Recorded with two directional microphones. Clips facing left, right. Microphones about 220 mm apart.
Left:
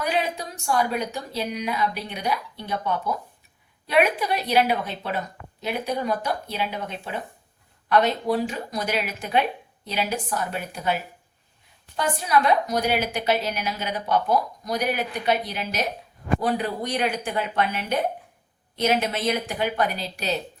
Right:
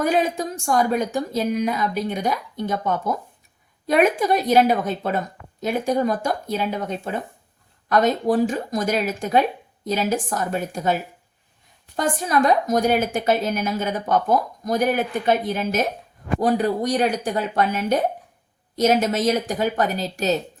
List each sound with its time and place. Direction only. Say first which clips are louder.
0.0 s a woman's voice: right 6 dB; 45° right (ahead or behind)